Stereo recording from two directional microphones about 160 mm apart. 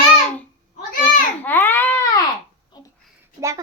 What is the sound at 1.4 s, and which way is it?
Speech, 10° left (ahead or behind).